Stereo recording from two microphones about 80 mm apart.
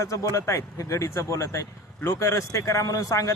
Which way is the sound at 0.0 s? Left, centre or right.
Left.